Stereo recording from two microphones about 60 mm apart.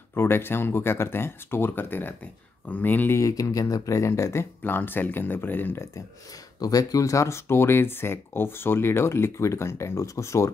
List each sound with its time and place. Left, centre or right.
0.1 s speech: left
3.2 s speech: left
4.6 s speech: left
6.6 s speech: left